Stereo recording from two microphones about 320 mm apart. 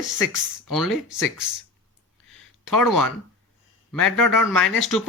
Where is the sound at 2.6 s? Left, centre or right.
Left.